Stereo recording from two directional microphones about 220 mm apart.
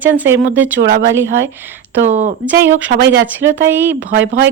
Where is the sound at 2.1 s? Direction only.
30° right (ahead or behind).